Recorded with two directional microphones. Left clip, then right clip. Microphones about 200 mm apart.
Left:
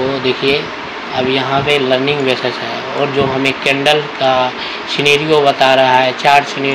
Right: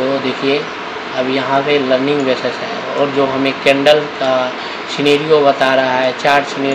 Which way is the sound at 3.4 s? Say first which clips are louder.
Right 4 dB; 35° left (ahead or behind).